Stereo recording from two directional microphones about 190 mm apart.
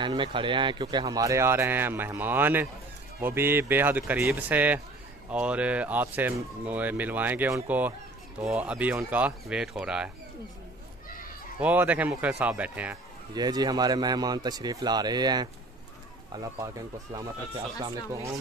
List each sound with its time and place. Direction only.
0.0 s speech: 25° right (ahead or behind); by 10.1 s 5° right (ahead or behind)
11.6 s speech: 10° right (ahead or behind)
13.3 s a man's voice: 20° right (ahead or behind)